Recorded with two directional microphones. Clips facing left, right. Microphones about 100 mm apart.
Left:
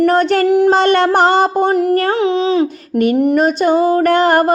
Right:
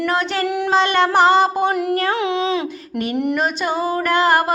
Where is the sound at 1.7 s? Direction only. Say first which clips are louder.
Left 6 dB; 35° left (ahead or behind).